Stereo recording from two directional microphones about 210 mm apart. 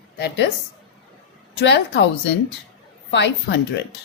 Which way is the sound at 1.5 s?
55° left (ahead or behind).